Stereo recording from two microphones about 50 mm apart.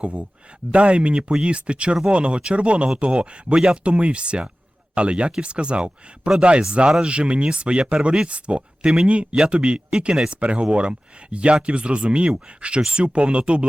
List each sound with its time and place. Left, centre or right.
0.0 s speech: right